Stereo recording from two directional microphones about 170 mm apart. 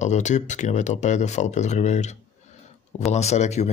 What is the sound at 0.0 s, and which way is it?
Speech, 45° left (ahead or behind).